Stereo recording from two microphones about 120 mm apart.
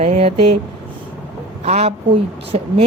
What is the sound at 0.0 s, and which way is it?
Speech, 60° right (ahead or behind).